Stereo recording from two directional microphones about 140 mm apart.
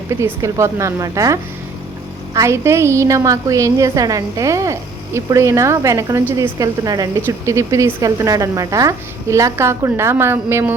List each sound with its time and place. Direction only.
0.1 s a woman's voice: 20° right (ahead or behind)